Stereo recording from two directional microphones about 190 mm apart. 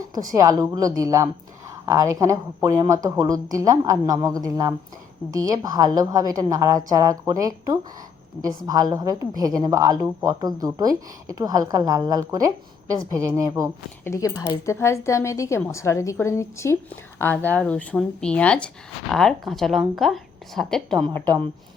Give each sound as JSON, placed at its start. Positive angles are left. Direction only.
{"t": 0.0, "sound": "a sound", "side_deg": -20}
{"t": 0.3, "sound": "a woman's voice", "side_deg": -15}
{"t": 14.0, "sound": "a woman's voice", "side_deg": 15}